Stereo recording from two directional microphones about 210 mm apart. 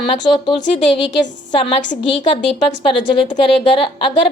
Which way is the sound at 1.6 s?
25° left (ahead or behind).